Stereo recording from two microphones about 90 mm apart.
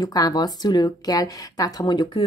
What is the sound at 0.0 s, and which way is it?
Speech, 45° left (ahead or behind).